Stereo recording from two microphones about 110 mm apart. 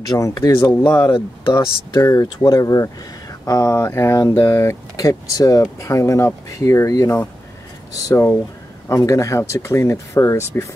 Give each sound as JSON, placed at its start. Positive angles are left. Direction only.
{"t": 0.1, "sound": "speech", "side_deg": 35}
{"t": 2.0, "sound": "speech", "side_deg": 30}